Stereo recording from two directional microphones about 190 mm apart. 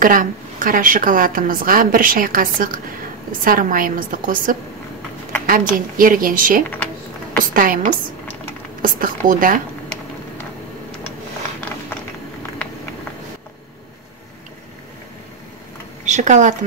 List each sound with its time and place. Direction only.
0.0 s a woman's voice: 45° right (ahead or behind)
16.1 s speech: 40° right (ahead or behind)